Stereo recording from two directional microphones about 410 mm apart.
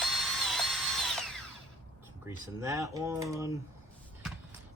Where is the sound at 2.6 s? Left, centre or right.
Centre.